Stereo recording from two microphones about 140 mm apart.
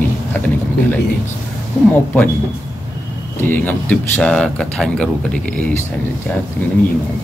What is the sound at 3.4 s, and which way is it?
A man's voice, 10° left (ahead or behind).